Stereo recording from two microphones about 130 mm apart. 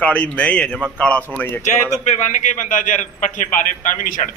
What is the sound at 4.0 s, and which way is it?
Speech, 90° left.